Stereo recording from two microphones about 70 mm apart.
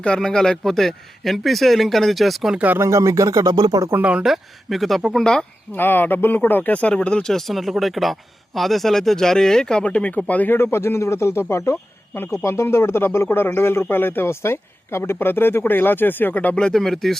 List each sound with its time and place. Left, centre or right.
0.0 s speech: centre
2.7 s speech: right
3.2 s speech: right
4.0 s speech: centre
4.3 s speech: centre
5.7 s speech: left
16.6 s speech: centre